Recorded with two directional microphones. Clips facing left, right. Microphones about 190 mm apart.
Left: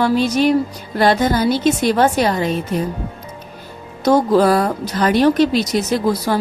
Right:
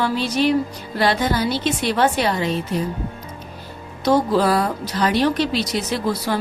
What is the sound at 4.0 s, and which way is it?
Speech, 45° left (ahead or behind).